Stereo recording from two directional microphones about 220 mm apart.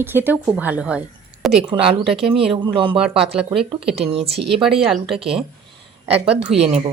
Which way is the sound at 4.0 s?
25° right (ahead or behind).